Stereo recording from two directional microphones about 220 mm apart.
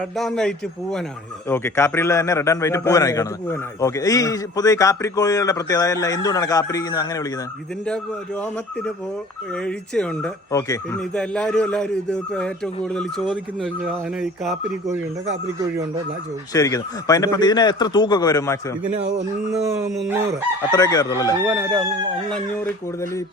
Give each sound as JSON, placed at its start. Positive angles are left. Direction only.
{"t": 0.2, "sound": "a man's voice", "side_deg": 0}
{"t": 9.6, "sound": "a man's voice", "side_deg": 5}
{"t": 10.5, "sound": "a man's voice", "side_deg": 15}
{"t": 11.1, "sound": "a man's voice", "side_deg": 5}
{"t": 16.5, "sound": "a man's voice", "side_deg": 15}
{"t": 19.5, "sound": "a man's voice", "side_deg": 0}
{"t": 20.7, "sound": "a man's voice", "side_deg": 15}
{"t": 21.4, "sound": "a man's voice", "side_deg": -5}